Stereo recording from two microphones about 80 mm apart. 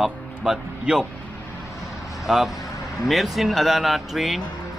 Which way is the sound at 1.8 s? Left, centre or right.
Centre.